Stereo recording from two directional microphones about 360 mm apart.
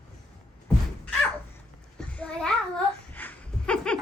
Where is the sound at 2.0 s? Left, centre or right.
Centre.